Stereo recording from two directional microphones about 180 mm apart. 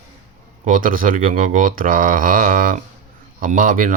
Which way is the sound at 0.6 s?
50° right (ahead or behind).